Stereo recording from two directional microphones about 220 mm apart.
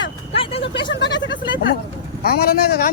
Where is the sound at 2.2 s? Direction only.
45° left (ahead or behind).